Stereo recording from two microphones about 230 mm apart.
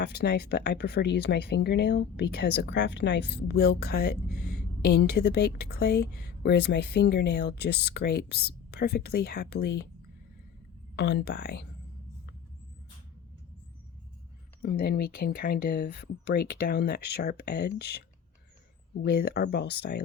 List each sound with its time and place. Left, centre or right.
0.0 s speech: left
10.9 s speech: left
14.6 s speech: left
19.0 s speech: left